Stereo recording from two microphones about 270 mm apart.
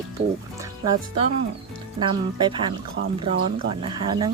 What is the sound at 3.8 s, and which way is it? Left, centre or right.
Speech, centre.